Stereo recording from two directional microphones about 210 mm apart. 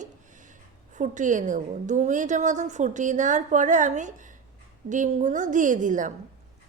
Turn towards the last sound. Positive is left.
turn(degrees=-35)  # may be behind; listen again after turning